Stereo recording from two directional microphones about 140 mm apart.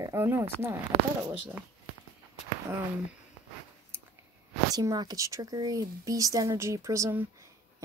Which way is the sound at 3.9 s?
15° right (ahead or behind).